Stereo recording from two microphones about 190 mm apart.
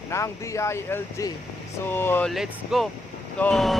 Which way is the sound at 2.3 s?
Centre (ahead or behind).